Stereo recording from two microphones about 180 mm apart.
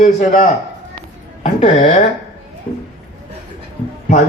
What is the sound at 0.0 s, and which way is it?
A man's voice, 40° left (ahead or behind).